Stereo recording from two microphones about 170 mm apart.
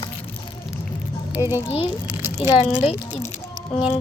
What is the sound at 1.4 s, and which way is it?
Speech, 15° right (ahead or behind).